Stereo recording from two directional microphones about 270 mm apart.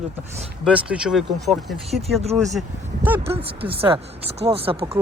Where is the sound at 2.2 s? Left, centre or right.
Right.